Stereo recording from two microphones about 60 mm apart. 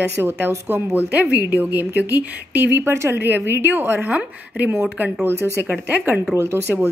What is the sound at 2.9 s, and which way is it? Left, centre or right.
Speech, right.